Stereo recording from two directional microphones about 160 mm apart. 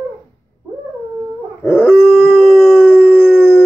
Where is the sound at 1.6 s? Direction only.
10° left (ahead or behind).